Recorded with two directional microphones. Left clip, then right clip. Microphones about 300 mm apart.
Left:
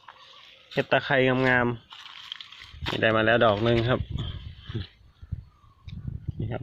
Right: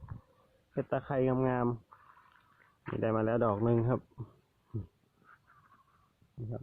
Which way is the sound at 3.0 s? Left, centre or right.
Centre.